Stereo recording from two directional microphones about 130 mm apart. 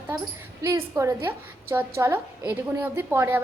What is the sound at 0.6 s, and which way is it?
A woman's voice, 25° right (ahead or behind).